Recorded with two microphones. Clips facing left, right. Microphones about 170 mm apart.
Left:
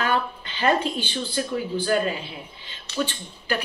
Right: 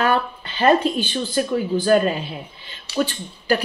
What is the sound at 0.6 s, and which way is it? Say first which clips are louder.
A woman's voice: right 6 dB; 45° right (ahead or behind).